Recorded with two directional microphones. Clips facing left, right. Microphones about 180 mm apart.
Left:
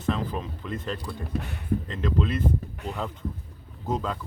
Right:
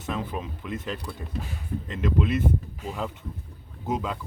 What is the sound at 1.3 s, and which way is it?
Speech, 65° left (ahead or behind).